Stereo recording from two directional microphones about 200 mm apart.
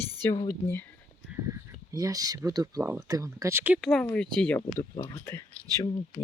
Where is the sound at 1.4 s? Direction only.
15° right (ahead or behind).